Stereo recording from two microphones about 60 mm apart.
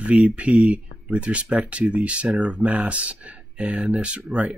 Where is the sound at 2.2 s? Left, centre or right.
Centre.